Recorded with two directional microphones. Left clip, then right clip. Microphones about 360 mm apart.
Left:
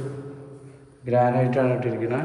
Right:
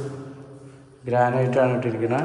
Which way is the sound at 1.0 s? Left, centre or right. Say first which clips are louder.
Even; centre.